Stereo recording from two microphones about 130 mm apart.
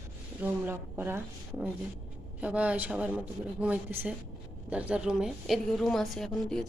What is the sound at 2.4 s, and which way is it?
A woman's voice, 10° right (ahead or behind).